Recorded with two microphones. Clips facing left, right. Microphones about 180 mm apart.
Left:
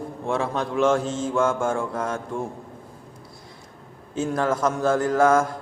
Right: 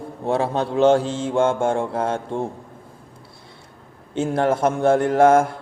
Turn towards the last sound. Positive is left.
turn(degrees=-30)  # may be behind; listen again after turning